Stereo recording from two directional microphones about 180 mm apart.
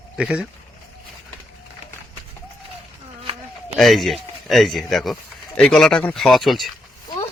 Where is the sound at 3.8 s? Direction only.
Centre (ahead or behind).